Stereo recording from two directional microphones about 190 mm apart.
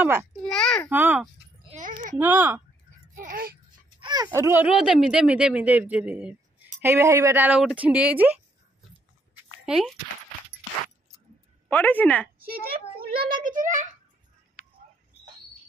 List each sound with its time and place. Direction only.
0.0 s speech: 10° right (ahead or behind)
0.5 s a child's voice: 5° left (ahead or behind)
0.8 s speech: 10° right (ahead or behind)
1.8 s a sound: 45° right (ahead or behind)
2.1 s speech: 10° right (ahead or behind)
3.2 s a child's voice: 50° right (ahead or behind)
4.0 s speech: 20° right (ahead or behind)
9.7 s speech: centre (ahead or behind)
11.7 s speech: 10° left (ahead or behind)
13.2 s a child's voice: 45° right (ahead or behind)